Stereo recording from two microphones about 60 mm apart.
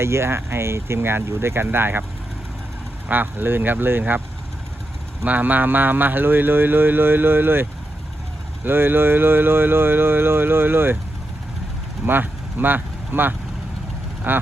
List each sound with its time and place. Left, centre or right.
0.0 s speech: right
3.1 s a man's voice: right
5.2 s a man's voice: right
12.0 s a man's voice: right